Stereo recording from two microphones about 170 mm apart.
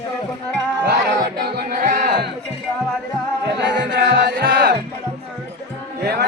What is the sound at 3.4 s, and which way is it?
Music, 85° right.